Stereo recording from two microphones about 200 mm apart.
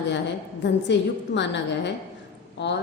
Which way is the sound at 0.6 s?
60° left (ahead or behind).